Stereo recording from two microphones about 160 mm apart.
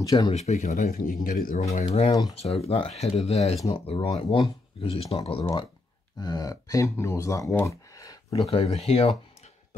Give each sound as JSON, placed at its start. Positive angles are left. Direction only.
{"t": 0.0, "sound": "speech", "side_deg": 20}
{"t": 0.3, "sound": "speech", "side_deg": 45}
{"t": 1.6, "sound": "speech", "side_deg": 40}
{"t": 8.3, "sound": "speech", "side_deg": 40}